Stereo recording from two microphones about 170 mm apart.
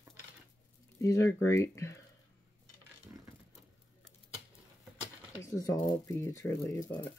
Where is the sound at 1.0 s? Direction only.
15° left (ahead or behind).